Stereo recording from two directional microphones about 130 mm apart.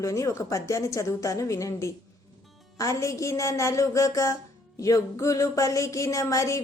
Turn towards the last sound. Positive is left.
turn(degrees=25)  # may be behind; listen again after turning